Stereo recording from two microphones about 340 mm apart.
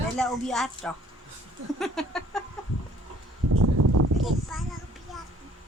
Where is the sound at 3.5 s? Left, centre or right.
Right.